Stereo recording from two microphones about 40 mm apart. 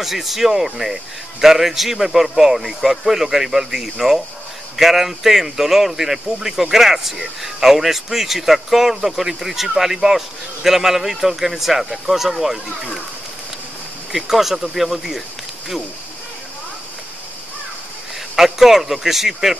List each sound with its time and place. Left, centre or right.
0.0 s speech: centre
14.3 s speech: centre
18.3 s speech: centre